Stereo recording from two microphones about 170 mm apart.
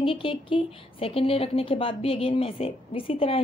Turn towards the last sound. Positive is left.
turn(degrees=30)  # may be behind; listen again after turning